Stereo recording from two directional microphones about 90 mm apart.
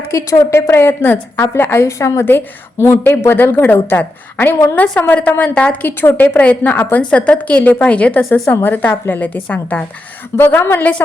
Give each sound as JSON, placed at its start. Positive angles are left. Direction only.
{"t": 0.1, "sound": "a woman's voice", "side_deg": 35}